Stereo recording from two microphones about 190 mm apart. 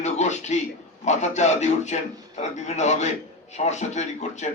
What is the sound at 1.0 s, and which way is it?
A man's voice, 35° left (ahead or behind).